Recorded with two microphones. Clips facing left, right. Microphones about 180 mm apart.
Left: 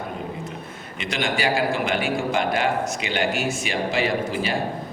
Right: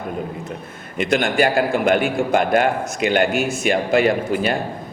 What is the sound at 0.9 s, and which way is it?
A man's voice, 50° right (ahead or behind).